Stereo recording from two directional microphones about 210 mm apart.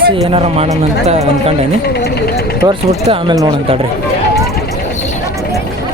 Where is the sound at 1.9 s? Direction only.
50° left (ahead or behind).